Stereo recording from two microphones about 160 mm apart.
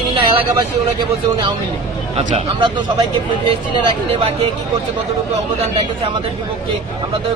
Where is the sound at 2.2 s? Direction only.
40° right (ahead or behind).